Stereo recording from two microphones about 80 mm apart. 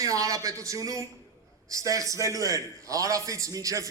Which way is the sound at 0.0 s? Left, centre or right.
Right.